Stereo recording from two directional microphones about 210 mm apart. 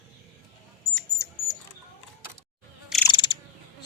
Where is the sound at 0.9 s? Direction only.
15° left (ahead or behind).